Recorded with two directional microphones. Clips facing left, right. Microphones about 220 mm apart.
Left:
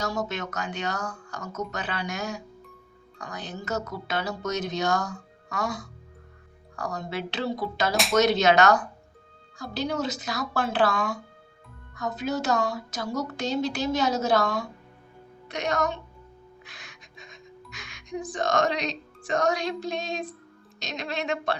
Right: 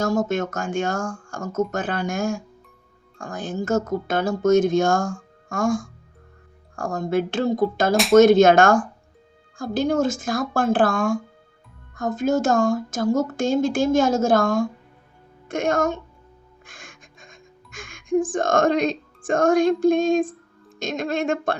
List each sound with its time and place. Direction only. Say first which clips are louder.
0.0 s speech: right 8 dB; 50° right (ahead or behind)
16.6 s music: right 3 dB; 50° right (ahead or behind)
20.7 s speech: right 8 dB; 50° right (ahead or behind)